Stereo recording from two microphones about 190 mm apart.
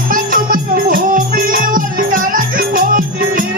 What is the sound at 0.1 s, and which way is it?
Music, 50° right (ahead or behind).